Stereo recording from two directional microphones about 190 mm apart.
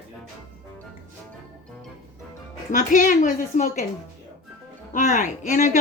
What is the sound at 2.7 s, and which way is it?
Speech, 45° left (ahead or behind).